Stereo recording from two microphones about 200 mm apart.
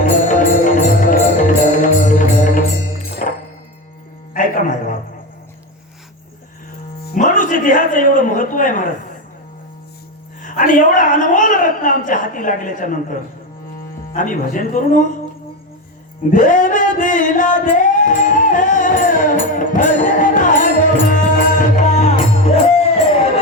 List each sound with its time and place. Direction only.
0.0 s music: 40° left (ahead or behind)
4.4 s music: 40° left (ahead or behind)
7.1 s a sound: 40° left (ahead or behind)
10.4 s a woman's voice: 40° left (ahead or behind)
16.3 s singing: 40° left (ahead or behind)